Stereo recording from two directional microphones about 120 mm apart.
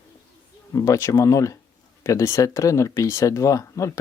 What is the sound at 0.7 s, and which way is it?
Speech, 25° left (ahead or behind).